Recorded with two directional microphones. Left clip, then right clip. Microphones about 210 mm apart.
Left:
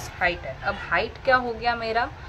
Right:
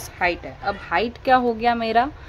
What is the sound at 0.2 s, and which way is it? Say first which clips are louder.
Speech: right 2 dB; 40° right (ahead or behind).